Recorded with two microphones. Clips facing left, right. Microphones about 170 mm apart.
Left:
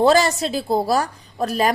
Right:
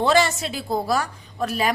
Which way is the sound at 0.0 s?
40° left (ahead or behind).